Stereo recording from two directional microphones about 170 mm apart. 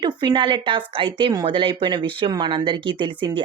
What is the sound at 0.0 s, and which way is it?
A woman's voice, 25° right (ahead or behind).